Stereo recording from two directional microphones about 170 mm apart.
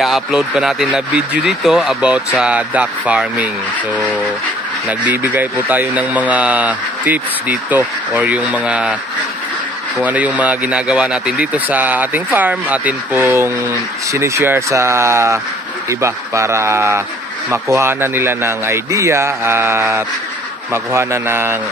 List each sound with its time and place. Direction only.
0.0 s speech: centre (ahead or behind)
4.8 s speech: 10° right (ahead or behind)
9.9 s speech: 10° right (ahead or behind)